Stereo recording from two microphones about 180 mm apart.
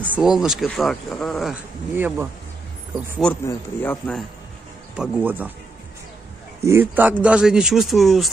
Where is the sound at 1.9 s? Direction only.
10° right (ahead or behind).